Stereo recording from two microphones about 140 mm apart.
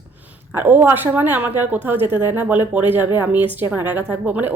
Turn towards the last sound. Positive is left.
turn(degrees=-10)  # may be behind; listen again after turning